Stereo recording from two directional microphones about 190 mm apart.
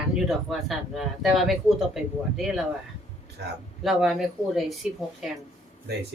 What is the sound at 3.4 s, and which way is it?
Speech, 65° right (ahead or behind).